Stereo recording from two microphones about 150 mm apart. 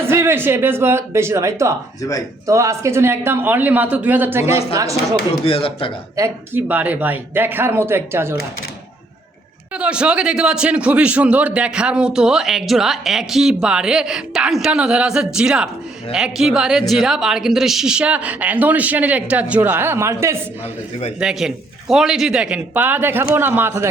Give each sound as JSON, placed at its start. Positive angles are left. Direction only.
{"t": 0.1, "sound": "speech", "side_deg": -15}
{"t": 2.0, "sound": "speech", "side_deg": 25}
{"t": 2.5, "sound": "speech", "side_deg": -20}
{"t": 5.5, "sound": "speech", "side_deg": 40}
{"t": 6.1, "sound": "speech", "side_deg": -15}
{"t": 9.7, "sound": "a man's voice", "side_deg": -5}
{"t": 21.2, "sound": "speech", "side_deg": -5}